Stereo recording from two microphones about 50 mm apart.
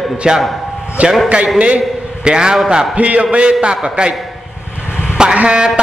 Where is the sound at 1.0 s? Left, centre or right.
Right.